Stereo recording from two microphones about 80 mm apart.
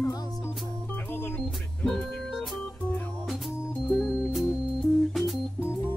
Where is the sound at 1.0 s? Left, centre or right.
Left.